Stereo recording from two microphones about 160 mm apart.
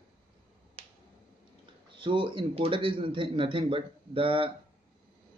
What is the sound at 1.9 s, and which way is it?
Speech, 30° right (ahead or behind).